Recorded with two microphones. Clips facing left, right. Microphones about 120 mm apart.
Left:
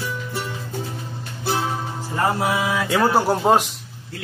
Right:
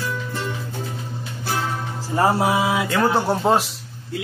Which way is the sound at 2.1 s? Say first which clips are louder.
Right 3 dB; 30° right (ahead or behind).